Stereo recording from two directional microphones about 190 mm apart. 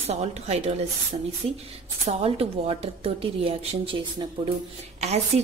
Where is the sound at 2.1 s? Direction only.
30° right (ahead or behind).